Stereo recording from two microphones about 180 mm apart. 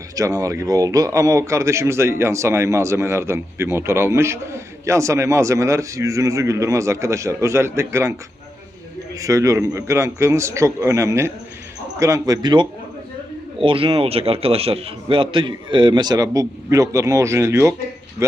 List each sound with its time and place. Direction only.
0.2 s speech: 20° right (ahead or behind)
9.1 s speech: 20° right (ahead or behind)